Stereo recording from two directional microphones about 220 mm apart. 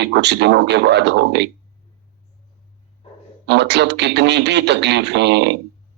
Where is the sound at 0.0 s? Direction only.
50° right (ahead or behind).